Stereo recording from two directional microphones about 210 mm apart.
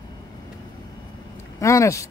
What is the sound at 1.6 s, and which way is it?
Speech, 15° left (ahead or behind).